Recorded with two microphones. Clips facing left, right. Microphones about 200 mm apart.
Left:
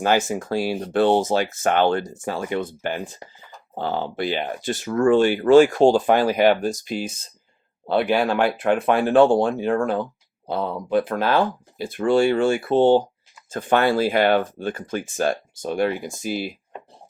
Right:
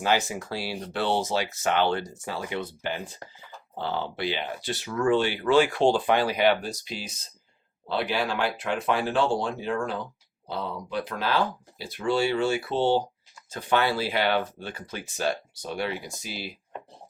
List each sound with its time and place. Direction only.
0.0 s speech: 50° left (ahead or behind)